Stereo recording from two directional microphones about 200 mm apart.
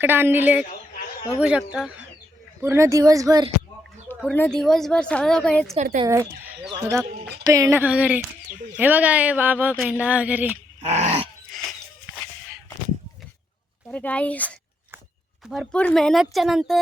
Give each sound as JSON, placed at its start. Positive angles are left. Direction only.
{"t": 0.0, "sound": "a woman's voice", "side_deg": -10}
{"t": 4.1, "sound": "a woman's voice", "side_deg": 5}
{"t": 5.7, "sound": "dog", "side_deg": -40}
{"t": 6.1, "sound": "speech", "side_deg": -15}
{"t": 10.8, "sound": "dog", "side_deg": -35}
{"t": 11.5, "sound": "a sound", "side_deg": 0}
{"t": 13.8, "sound": "a woman's voice", "side_deg": 5}